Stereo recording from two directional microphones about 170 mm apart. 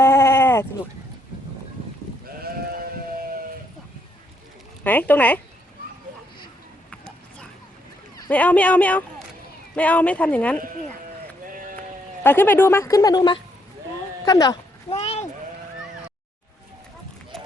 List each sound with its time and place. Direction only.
0.0 s sheep: 15° left (ahead or behind)
4.8 s speech: 10° left (ahead or behind)
8.3 s speech: 10° left (ahead or behind)
12.2 s speech: 10° left (ahead or behind)
14.8 s a sound: 35° left (ahead or behind)
17.3 s a sound: 5° left (ahead or behind)